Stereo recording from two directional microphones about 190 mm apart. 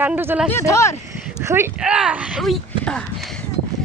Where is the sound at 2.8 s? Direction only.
5° left (ahead or behind).